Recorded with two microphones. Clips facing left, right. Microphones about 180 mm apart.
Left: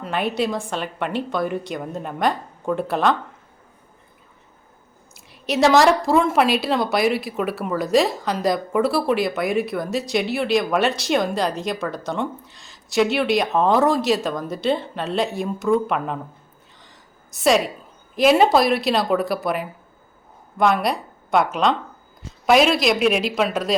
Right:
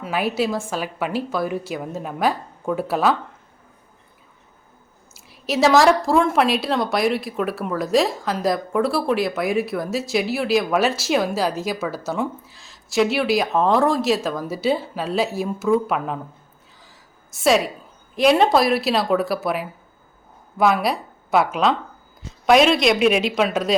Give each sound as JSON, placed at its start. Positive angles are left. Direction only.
{"t": 0.0, "sound": "a woman's voice", "side_deg": -5}
{"t": 5.1, "sound": "a woman's voice", "side_deg": 0}
{"t": 16.8, "sound": "a sound", "side_deg": 0}
{"t": 18.1, "sound": "a woman's voice", "side_deg": 0}